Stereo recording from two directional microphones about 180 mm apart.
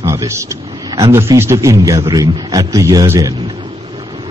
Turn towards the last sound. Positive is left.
turn(degrees=-20)  # may be behind; listen again after turning